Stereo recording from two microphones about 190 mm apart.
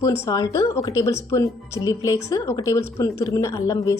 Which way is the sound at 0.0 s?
15° left (ahead or behind).